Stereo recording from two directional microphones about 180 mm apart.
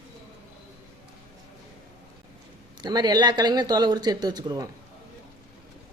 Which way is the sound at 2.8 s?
25° right (ahead or behind).